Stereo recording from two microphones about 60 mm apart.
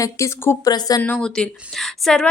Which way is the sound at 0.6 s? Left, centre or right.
Left.